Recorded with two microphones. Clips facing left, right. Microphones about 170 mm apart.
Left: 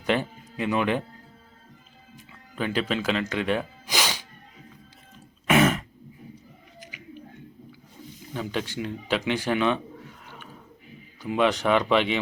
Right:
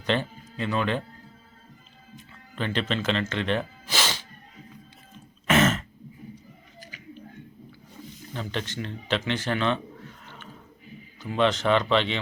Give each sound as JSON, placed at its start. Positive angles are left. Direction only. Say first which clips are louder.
{"t": 0.0, "sound": "speech", "louder": "left 1 dB", "side_deg": 10}
{"t": 2.1, "sound": "music", "louder": "left 1 dB", "side_deg": 5}
{"t": 5.5, "sound": "throat clearing", "louder": "left 1 dB", "side_deg": 10}
{"t": 6.7, "sound": "a sound", "louder": "left 1 dB", "side_deg": 20}
{"t": 8.3, "sound": "a man's voice", "louder": "left 3 dB", "side_deg": 10}